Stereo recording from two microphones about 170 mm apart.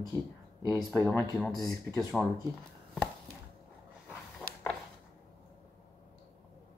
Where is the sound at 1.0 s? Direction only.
5° left (ahead or behind).